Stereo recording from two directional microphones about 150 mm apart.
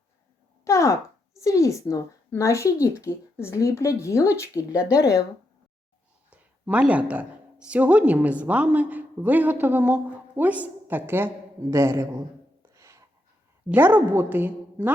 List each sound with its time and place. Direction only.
0.6 s a sound: 20° left (ahead or behind)
1.4 s speech: 20° left (ahead or behind)
4.8 s a woman's voice: 5° right (ahead or behind)
6.3 s a woman's voice: 10° right (ahead or behind)
12.7 s a sound: 20° right (ahead or behind)
13.7 s a woman's voice: 10° right (ahead or behind)